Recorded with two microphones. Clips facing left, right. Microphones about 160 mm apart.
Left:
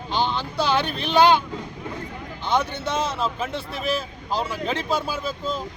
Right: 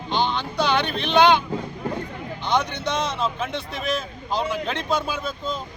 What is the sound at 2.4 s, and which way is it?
A man's voice, 5° left (ahead or behind).